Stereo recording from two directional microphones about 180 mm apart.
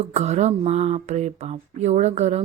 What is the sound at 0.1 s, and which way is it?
A woman's voice, 35° right (ahead or behind).